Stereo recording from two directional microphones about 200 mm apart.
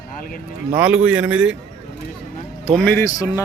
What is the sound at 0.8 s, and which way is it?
Speech, 5° right (ahead or behind).